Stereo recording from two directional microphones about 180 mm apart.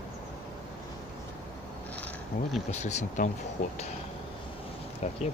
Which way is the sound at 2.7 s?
40° left (ahead or behind).